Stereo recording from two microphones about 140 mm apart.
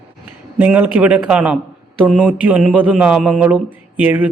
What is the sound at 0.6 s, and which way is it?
Speech, 10° right (ahead or behind).